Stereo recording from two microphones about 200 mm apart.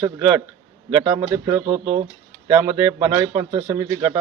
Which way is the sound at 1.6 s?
30° right (ahead or behind).